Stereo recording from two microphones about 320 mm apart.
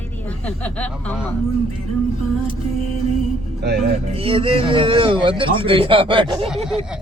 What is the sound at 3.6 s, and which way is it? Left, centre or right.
Speech, right.